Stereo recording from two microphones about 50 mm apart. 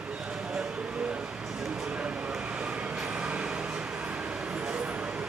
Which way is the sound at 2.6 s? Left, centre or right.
Centre.